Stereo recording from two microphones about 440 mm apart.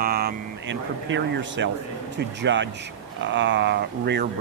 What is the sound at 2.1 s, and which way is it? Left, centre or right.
Speech, right.